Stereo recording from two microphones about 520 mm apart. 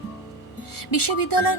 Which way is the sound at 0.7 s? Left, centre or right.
Left.